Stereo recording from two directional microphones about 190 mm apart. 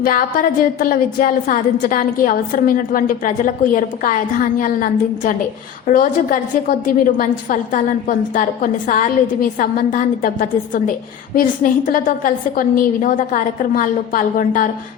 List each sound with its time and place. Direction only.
0.0 s a woman's voice: 45° left (ahead or behind)